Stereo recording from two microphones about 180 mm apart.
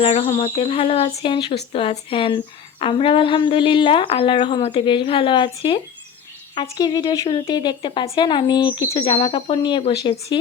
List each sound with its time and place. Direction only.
0.0 s speech: 30° left (ahead or behind)